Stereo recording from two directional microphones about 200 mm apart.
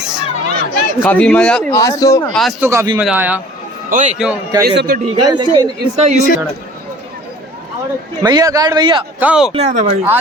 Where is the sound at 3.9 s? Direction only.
35° right (ahead or behind).